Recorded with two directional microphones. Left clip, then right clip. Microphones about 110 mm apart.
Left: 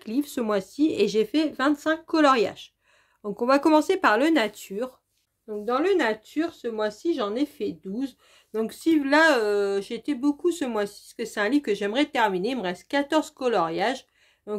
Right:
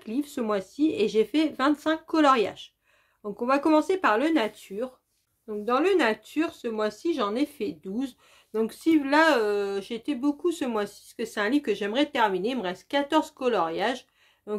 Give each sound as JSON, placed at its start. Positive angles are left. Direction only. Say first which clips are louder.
{"t": 0.0, "sound": "speech", "louder": "left 2 dB", "side_deg": 65}
{"t": 3.2, "sound": "speech", "louder": "left 3 dB", "side_deg": 70}
{"t": 5.5, "sound": "speech", "louder": "even", "side_deg": 15}
{"t": 8.5, "sound": "speech", "louder": "even", "side_deg": 35}